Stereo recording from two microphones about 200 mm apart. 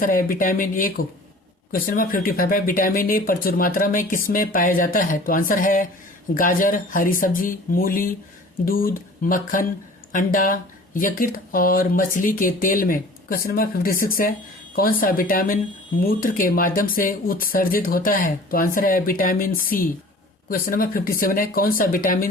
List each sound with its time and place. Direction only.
0.0 s speech: 45° left (ahead or behind)